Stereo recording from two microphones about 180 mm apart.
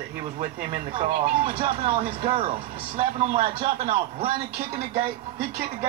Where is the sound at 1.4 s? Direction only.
30° right (ahead or behind).